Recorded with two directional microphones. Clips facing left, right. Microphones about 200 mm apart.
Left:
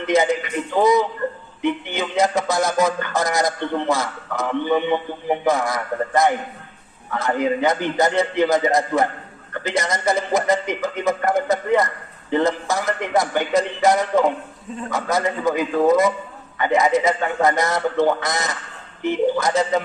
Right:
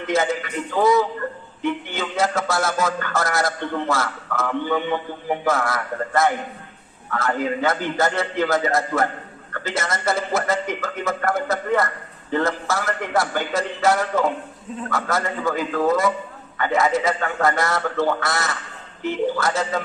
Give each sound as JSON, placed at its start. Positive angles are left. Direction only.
{"t": 0.1, "sound": "music", "side_deg": 15}